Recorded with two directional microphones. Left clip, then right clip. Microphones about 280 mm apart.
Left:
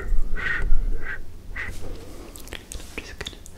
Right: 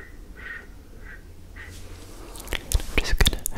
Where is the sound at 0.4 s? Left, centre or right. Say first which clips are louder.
Left 11 dB; left.